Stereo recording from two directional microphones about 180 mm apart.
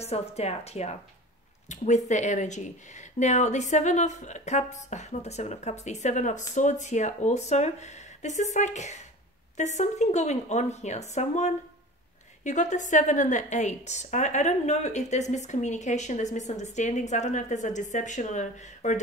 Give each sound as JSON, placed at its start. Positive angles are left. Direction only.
{"t": 0.0, "sound": "a woman's voice", "side_deg": 35}